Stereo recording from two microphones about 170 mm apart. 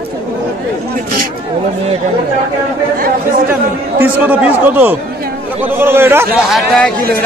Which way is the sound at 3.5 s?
10° right (ahead or behind).